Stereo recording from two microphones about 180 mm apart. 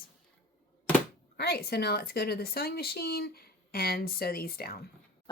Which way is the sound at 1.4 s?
60° left (ahead or behind).